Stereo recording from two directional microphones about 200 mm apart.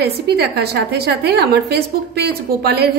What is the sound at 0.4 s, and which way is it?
A woman's voice, 55° right (ahead or behind).